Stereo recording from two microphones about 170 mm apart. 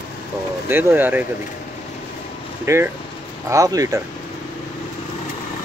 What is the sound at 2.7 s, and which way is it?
Speech, 15° right (ahead or behind).